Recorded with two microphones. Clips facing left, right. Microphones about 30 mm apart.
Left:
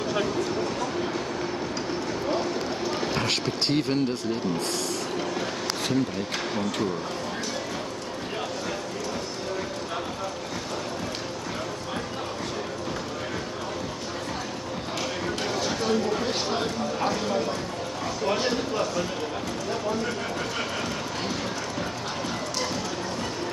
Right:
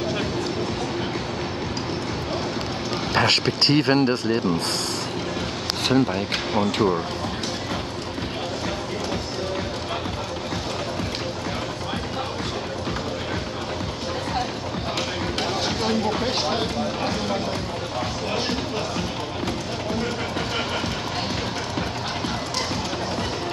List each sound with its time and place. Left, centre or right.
3.2 s speech: right
5.9 s speech: right
15.6 s a sound: right